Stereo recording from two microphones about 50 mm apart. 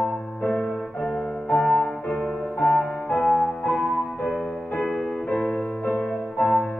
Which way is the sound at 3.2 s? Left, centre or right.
Centre.